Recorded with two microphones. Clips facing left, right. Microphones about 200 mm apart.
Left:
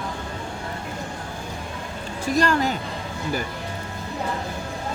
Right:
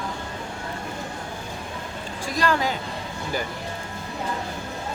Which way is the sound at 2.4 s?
45° left (ahead or behind).